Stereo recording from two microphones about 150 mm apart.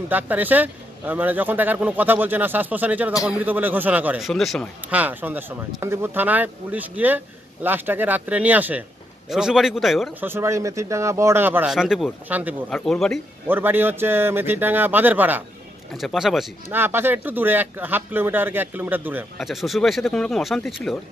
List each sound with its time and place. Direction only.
0.1 s speech: 10° right (ahead or behind)
4.3 s speech: centre (ahead or behind)
4.8 s speech: 10° right (ahead or behind)
10.2 s speech: 15° right (ahead or behind)
12.6 s speech: 5° left (ahead or behind)
13.5 s speech: 15° right (ahead or behind)
15.9 s speech: centre (ahead or behind)
16.6 s speech: 15° right (ahead or behind)
19.3 s speech: centre (ahead or behind)